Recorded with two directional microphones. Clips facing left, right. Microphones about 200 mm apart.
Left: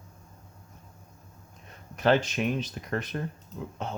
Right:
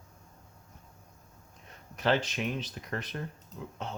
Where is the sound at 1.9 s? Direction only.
50° left (ahead or behind).